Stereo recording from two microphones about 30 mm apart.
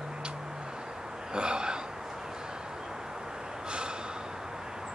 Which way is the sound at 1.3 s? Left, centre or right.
Right.